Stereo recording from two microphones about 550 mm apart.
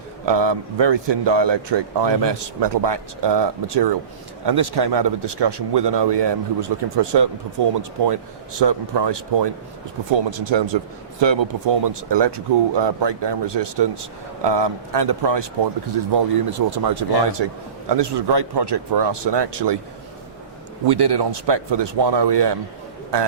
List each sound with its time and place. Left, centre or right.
0.3 s a man's voice: right
20.8 s a man's voice: right